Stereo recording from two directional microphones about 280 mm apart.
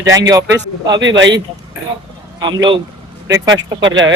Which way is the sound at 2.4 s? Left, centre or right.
Centre.